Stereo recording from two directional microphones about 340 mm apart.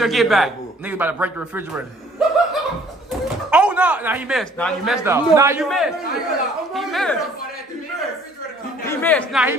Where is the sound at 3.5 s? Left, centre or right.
Centre.